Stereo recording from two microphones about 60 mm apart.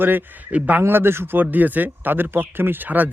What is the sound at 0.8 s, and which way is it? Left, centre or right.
Speech, right.